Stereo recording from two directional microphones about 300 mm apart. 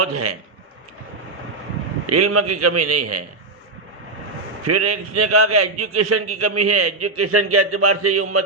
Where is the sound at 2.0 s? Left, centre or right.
Right.